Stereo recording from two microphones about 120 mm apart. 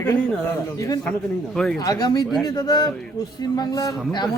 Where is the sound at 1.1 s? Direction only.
5° left (ahead or behind).